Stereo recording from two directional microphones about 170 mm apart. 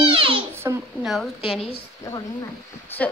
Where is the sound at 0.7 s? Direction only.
20° right (ahead or behind).